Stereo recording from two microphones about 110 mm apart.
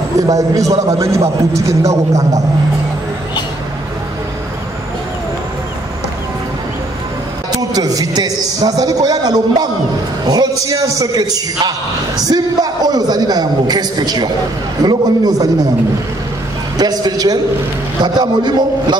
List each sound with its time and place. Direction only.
0.3 s a man's voice: 30° right (ahead or behind)
7.7 s a man's voice: 35° right (ahead or behind)
16.7 s a man's voice: 40° right (ahead or behind)